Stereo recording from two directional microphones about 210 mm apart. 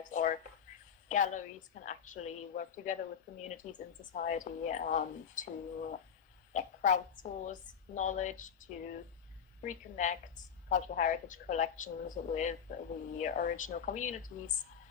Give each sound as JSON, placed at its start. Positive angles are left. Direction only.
{"t": 0.0, "sound": "a woman's voice", "side_deg": 35}